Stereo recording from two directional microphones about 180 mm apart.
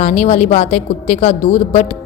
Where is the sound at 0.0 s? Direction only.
40° left (ahead or behind).